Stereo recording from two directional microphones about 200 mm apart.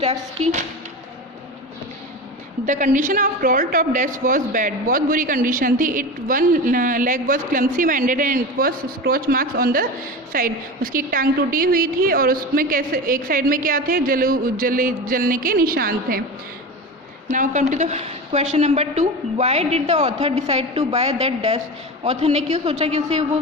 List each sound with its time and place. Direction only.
0.0 s speech: 30° right (ahead or behind)
2.6 s a woman's voice: 40° right (ahead or behind)
17.3 s a woman's voice: 40° right (ahead or behind)